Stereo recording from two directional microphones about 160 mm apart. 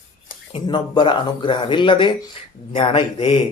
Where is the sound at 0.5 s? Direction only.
30° left (ahead or behind).